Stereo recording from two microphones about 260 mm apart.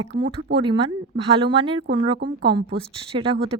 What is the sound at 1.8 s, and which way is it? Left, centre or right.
Speech, right.